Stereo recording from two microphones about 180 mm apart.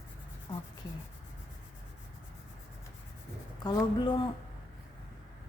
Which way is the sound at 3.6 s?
25° left (ahead or behind).